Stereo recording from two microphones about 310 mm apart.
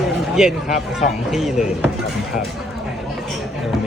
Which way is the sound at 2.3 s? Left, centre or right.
Left.